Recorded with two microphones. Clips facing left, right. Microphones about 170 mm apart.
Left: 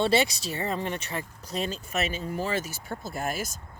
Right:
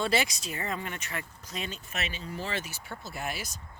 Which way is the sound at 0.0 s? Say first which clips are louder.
Left 5 dB; 30° left (ahead or behind).